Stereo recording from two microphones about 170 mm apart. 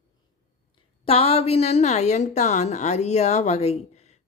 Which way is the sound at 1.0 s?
35° left (ahead or behind).